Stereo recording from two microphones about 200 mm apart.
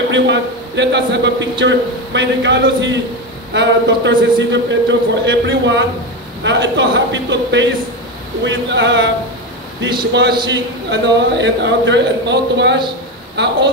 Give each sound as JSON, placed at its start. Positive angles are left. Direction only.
{"t": 0.1, "sound": "a man's voice", "side_deg": -60}
{"t": 10.1, "sound": "a man's voice", "side_deg": -60}